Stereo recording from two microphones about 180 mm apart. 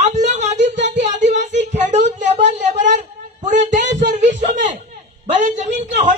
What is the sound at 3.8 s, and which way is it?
Speech, 80° right.